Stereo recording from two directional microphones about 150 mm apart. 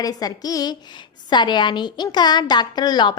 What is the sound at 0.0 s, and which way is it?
A woman's voice, 25° left (ahead or behind).